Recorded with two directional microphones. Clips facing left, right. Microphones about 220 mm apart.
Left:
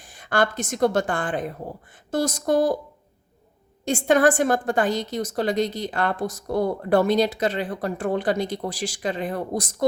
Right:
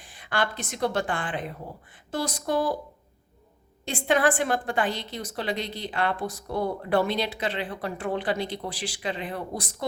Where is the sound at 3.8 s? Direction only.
45° left (ahead or behind).